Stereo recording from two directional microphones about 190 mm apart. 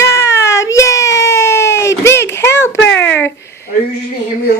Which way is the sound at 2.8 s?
70° left (ahead or behind).